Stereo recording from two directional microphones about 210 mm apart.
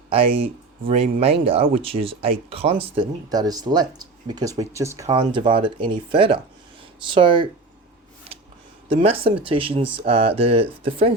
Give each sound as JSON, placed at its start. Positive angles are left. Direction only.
{"t": 0.1, "sound": "speech", "side_deg": -25}
{"t": 9.0, "sound": "speech", "side_deg": -30}